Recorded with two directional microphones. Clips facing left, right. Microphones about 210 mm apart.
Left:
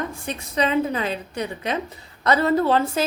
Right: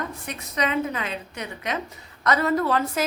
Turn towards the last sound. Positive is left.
turn(degrees=30)  # may be behind; listen again after turning